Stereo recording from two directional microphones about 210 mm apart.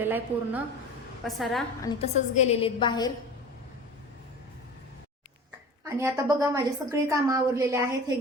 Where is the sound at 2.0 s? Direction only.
30° left (ahead or behind).